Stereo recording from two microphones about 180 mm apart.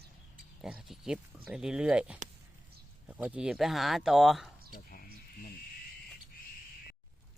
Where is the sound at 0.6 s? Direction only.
5° right (ahead or behind).